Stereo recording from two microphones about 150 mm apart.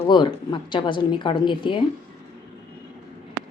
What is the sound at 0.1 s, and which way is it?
A woman's voice, 30° left (ahead or behind).